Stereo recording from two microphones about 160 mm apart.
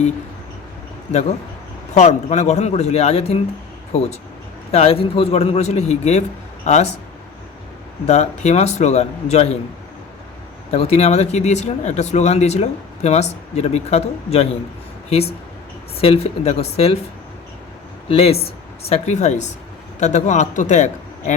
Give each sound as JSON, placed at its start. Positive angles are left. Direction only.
{"t": 2.0, "sound": "speech", "side_deg": 45}
{"t": 4.7, "sound": "a man's voice", "side_deg": 40}
{"t": 8.0, "sound": "speech", "side_deg": 45}
{"t": 10.7, "sound": "a man's voice", "side_deg": 40}
{"t": 18.1, "sound": "a man's voice", "side_deg": 40}